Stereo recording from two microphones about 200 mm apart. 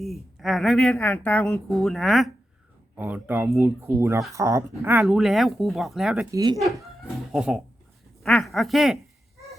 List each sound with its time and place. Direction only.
0.0 s a woman's voice: centre (ahead or behind)
5.0 s a woman's voice: centre (ahead or behind)
6.3 s speech: 20° right (ahead or behind)
7.3 s a woman's voice: centre (ahead or behind)